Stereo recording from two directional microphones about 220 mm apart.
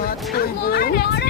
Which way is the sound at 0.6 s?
45° left (ahead or behind).